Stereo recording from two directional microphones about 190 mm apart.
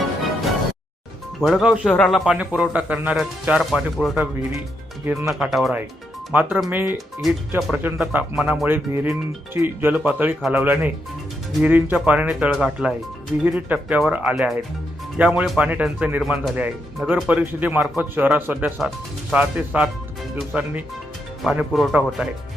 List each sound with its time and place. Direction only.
1.4 s speech: centre (ahead or behind)
5.0 s speech: 15° right (ahead or behind)
5.3 s speech: centre (ahead or behind)